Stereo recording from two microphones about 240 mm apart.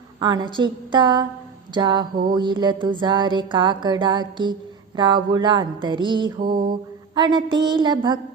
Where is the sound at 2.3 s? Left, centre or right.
Centre.